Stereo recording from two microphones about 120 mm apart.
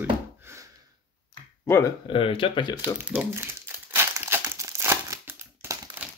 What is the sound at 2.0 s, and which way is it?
Speech, 45° left (ahead or behind).